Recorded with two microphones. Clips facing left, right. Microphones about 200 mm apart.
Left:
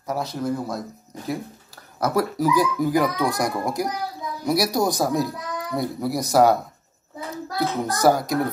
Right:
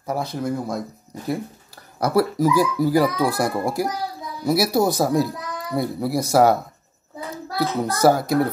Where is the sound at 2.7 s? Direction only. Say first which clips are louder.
Right 2 dB; 35° right (ahead or behind).